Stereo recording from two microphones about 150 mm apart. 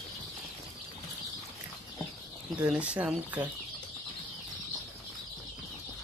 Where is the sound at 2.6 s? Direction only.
10° right (ahead or behind).